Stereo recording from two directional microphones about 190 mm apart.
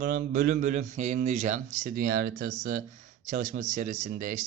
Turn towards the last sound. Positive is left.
turn(degrees=-45)  # may be behind; listen again after turning